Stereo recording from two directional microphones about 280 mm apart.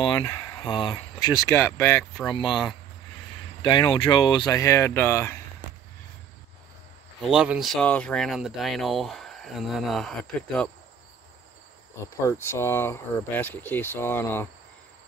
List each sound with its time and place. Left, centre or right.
0.0 s speech: centre
2.3 s speech: centre
3.6 s speech: centre
7.2 s speech: centre
12.3 s speech: centre